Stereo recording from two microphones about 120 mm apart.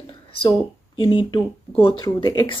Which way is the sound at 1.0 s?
40° left (ahead or behind).